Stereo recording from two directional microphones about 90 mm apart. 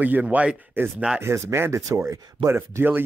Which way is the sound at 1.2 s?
30° right (ahead or behind).